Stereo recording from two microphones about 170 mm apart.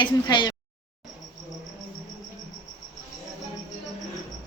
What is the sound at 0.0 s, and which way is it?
Speech, 25° left (ahead or behind).